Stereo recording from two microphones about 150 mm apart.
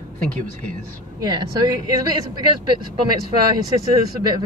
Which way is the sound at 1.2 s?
30° right (ahead or behind).